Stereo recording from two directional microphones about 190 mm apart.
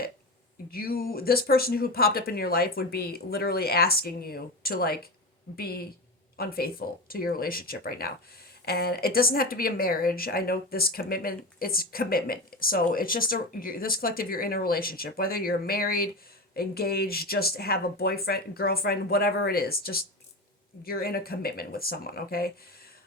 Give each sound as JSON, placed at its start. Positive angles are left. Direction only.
{"t": 0.7, "sound": "speech", "side_deg": 50}